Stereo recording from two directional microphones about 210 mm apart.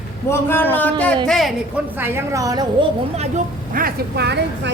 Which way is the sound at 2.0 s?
10° right (ahead or behind).